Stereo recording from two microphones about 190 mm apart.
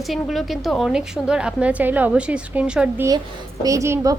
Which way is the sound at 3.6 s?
15° right (ahead or behind).